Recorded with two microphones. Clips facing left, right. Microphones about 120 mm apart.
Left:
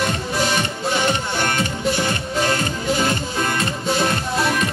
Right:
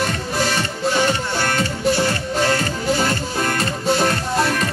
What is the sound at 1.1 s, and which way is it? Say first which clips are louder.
Music: right 1 dB; 20° left (ahead or behind).